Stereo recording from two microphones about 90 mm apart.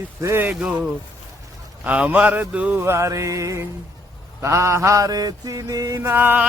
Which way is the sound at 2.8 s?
30° right (ahead or behind).